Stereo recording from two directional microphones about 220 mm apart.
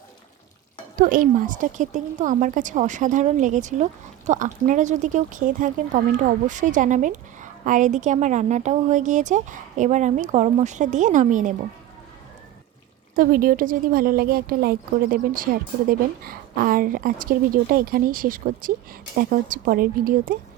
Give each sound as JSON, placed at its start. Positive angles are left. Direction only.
{"t": 0.9, "sound": "speech", "side_deg": -40}
{"t": 13.1, "sound": "speech", "side_deg": -40}